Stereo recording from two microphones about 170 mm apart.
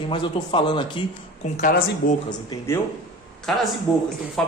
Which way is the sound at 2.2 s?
15° left (ahead or behind).